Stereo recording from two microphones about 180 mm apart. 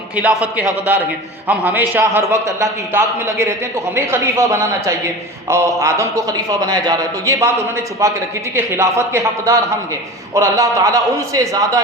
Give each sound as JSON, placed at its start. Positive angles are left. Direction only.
{"t": 0.5, "sound": "a man's voice", "side_deg": -10}
{"t": 8.5, "sound": "a man's voice", "side_deg": -15}